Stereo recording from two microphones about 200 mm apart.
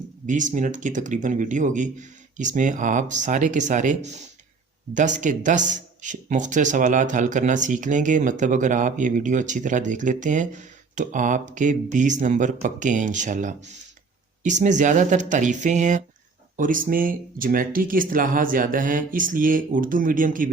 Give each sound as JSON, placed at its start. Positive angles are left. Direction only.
{"t": 0.3, "sound": "speech", "side_deg": -40}